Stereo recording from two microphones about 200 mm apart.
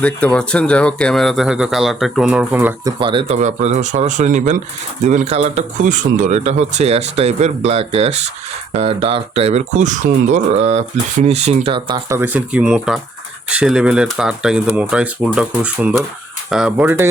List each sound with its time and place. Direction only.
0.0 s speech: 5° left (ahead or behind)
3.0 s speech: 25° right (ahead or behind)
12.0 s speech: 10° right (ahead or behind)